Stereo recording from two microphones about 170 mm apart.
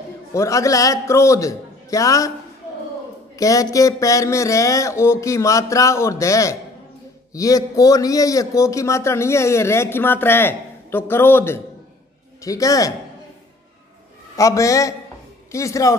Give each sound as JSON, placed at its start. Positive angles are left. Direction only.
{"t": 0.3, "sound": "a man's voice", "side_deg": 20}
{"t": 3.3, "sound": "a man's voice", "side_deg": 20}
{"t": 14.3, "sound": "a man's voice", "side_deg": 20}